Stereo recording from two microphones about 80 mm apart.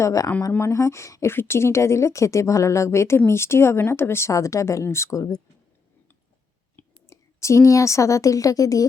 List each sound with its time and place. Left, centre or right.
0.0 s speech: left
4.3 s speech: left
6.8 s whispering: left
7.1 s speech: left